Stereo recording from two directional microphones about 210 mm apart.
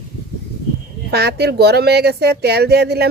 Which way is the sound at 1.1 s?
50° right (ahead or behind).